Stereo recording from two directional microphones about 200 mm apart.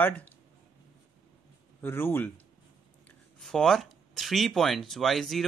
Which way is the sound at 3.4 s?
Centre (ahead or behind).